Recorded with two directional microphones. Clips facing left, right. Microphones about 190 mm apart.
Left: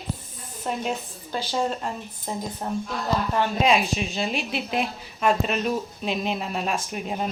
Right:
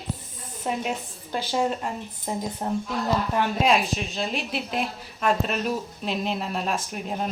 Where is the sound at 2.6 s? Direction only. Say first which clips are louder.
Right 2 dB; 25° right (ahead or behind).